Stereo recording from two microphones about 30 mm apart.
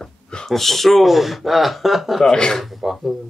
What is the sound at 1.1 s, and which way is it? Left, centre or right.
Speech, centre.